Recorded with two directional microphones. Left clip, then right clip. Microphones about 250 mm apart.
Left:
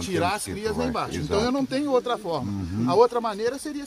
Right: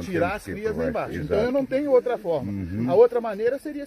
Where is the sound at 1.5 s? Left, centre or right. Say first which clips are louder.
Right 3 dB; left.